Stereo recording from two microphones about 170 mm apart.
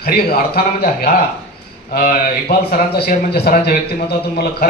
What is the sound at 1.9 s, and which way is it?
A man's voice, 60° left (ahead or behind).